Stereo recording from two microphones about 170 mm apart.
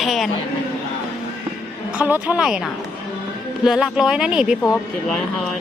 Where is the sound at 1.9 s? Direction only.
10° right (ahead or behind).